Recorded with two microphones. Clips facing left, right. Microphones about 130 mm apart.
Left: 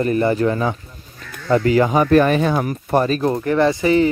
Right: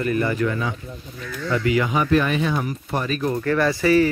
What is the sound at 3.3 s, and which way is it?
Speech, 25° left (ahead or behind).